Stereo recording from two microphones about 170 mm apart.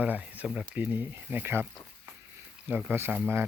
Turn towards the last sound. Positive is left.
turn(degrees=-10)  # may be behind; listen again after turning